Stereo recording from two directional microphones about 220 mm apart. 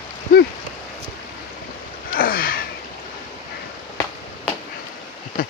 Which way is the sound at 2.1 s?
40° left (ahead or behind).